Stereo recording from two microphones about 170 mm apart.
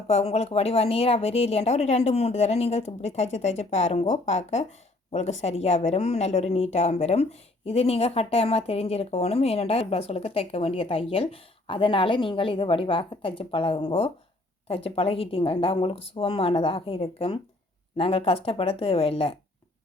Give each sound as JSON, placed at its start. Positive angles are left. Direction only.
{"t": 0.1, "sound": "a woman's voice", "side_deg": 40}